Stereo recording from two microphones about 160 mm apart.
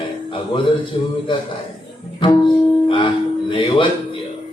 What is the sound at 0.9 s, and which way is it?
Speech, 30° left (ahead or behind).